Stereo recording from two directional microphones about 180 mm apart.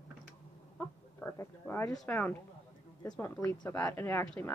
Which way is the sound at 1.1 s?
10° left (ahead or behind).